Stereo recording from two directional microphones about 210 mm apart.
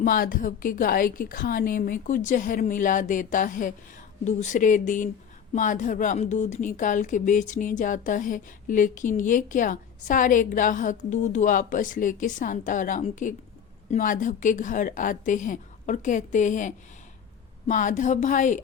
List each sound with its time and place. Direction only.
0.0 s a woman's voice: 40° left (ahead or behind)